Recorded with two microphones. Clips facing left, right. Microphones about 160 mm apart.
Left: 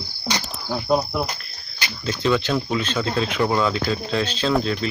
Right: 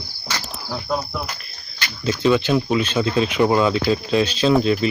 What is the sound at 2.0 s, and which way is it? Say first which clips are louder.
Speech: right 4 dB; 10° right (ahead or behind).